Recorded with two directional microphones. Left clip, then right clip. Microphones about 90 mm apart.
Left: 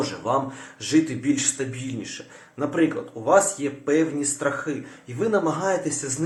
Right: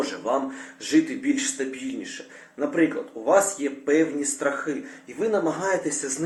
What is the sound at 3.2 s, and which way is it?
Speech, 30° left (ahead or behind).